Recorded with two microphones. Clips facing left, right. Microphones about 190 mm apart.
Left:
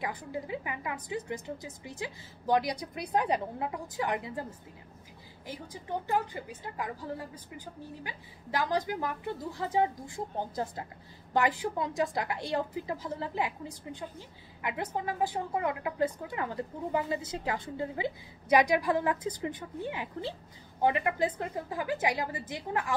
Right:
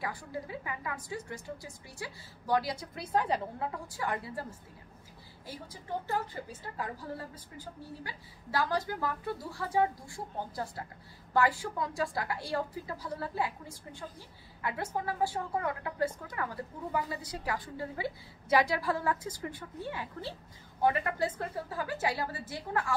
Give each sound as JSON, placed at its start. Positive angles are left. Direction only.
{"t": 0.0, "sound": "a woman's voice", "side_deg": 20}
{"t": 5.5, "sound": "a woman's voice", "side_deg": 15}